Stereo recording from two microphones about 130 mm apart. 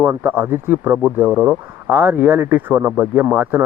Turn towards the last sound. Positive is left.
turn(degrees=-15)  # may be behind; listen again after turning